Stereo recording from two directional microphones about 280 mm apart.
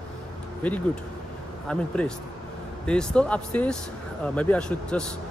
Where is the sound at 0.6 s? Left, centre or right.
Centre.